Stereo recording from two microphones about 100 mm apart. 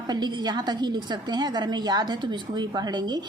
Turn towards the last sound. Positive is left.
turn(degrees=-45)  # may be behind; listen again after turning